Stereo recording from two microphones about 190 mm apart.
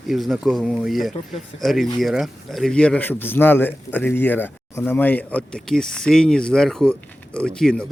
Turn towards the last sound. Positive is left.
turn(degrees=5)  # may be behind; listen again after turning